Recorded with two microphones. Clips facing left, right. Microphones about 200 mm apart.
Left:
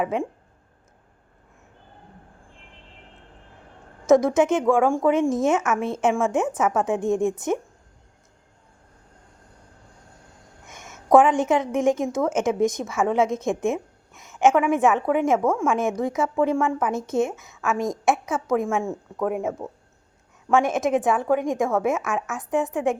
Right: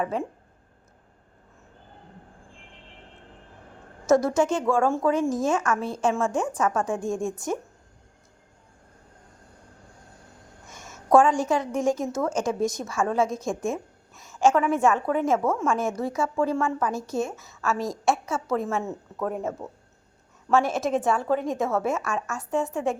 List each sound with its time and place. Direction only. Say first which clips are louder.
0.0 s a woman's voice: left 3 dB; 15° left (ahead or behind)
4.0 s a woman's voice: left 3 dB; 15° left (ahead or behind)
10.7 s a woman's voice: left 3 dB; 20° left (ahead or behind)